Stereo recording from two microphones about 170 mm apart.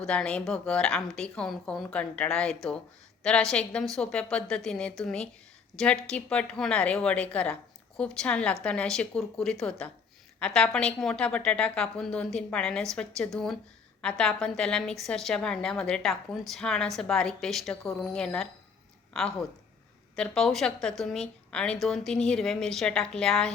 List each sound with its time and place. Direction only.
0.0 s a woman's voice: 5° left (ahead or behind)